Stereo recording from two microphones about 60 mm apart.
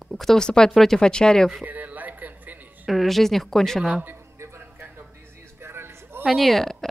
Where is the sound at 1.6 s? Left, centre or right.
Right.